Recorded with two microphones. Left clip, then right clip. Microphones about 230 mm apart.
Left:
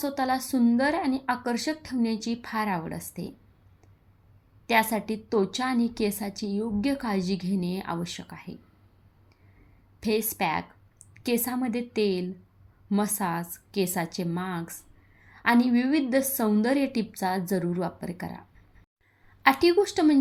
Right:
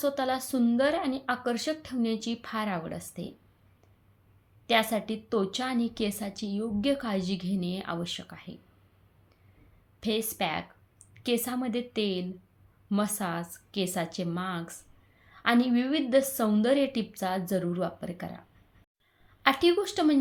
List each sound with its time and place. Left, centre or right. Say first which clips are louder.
0.0 s a woman's voice: left 1 dB; centre
4.6 s a woman's voice: left 2 dB; centre
10.0 s a woman's voice: left 3 dB; centre